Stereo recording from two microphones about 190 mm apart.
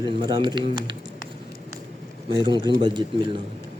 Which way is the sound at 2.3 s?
25° right (ahead or behind).